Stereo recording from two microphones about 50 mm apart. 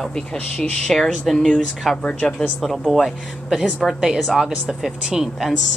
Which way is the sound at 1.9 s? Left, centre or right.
Centre.